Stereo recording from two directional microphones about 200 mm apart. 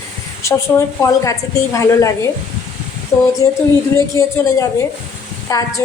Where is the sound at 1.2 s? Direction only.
15° left (ahead or behind).